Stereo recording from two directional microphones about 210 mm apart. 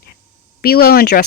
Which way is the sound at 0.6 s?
45° left (ahead or behind).